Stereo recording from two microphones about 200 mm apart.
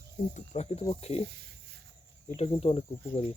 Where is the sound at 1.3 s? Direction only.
55° right (ahead or behind).